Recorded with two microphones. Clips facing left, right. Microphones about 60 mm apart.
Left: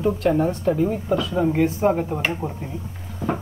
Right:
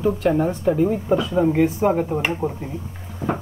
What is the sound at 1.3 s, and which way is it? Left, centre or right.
Speech, centre.